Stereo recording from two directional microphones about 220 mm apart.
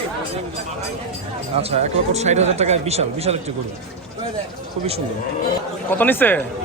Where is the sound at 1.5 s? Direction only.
30° right (ahead or behind).